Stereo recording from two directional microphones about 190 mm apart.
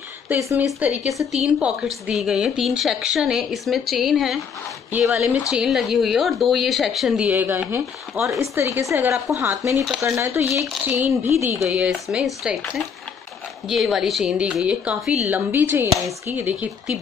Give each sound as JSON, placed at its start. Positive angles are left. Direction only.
{"t": 0.3, "sound": "a woman's voice", "side_deg": -10}
{"t": 13.7, "sound": "a woman's voice", "side_deg": 0}